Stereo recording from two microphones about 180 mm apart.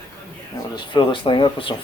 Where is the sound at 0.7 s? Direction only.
25° left (ahead or behind).